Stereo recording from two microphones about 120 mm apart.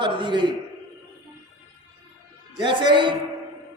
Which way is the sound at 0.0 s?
40° right (ahead or behind).